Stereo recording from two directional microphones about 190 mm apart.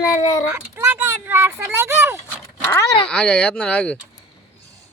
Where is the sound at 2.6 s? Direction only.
15° left (ahead or behind).